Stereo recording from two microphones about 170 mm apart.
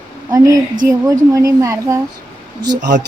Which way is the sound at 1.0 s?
20° right (ahead or behind).